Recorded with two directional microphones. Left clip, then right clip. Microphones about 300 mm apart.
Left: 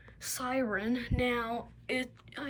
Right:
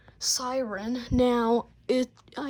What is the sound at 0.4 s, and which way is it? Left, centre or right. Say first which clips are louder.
A woman's voice: right 2 dB; centre.